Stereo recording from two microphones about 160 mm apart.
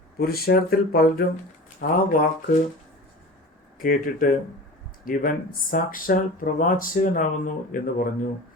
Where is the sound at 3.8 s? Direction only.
60° left (ahead or behind).